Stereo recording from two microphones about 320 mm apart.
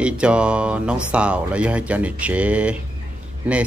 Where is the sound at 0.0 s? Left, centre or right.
Centre.